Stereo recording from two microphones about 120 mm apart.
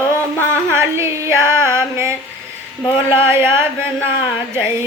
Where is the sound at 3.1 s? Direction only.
20° right (ahead or behind).